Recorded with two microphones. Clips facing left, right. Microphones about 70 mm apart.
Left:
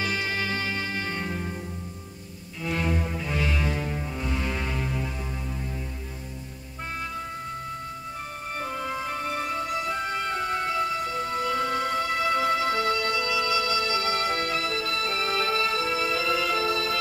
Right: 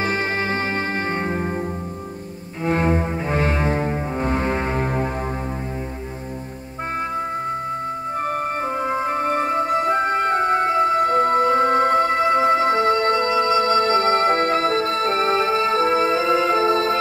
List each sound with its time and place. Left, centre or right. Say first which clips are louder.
0.0 s music: right 6 dB; right
2.6 s cello: right 8 dB; right
8.8 s music: right 11 dB; right